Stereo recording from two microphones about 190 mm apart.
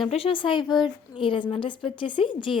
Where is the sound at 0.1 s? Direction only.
30° left (ahead or behind).